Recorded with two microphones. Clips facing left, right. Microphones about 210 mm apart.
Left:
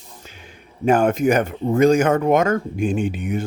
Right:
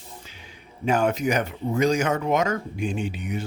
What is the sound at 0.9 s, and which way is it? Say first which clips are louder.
Speech: left 6 dB; 50° left (ahead or behind).